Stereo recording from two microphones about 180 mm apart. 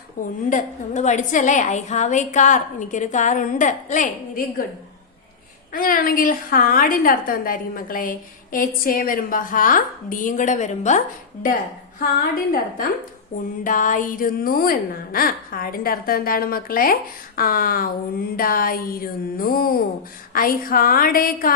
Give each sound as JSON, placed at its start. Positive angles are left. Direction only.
{"t": 0.2, "sound": "a woman's voice", "side_deg": 45}
{"t": 5.7, "sound": "a woman's voice", "side_deg": 50}
{"t": 11.9, "sound": "a woman's voice", "side_deg": 55}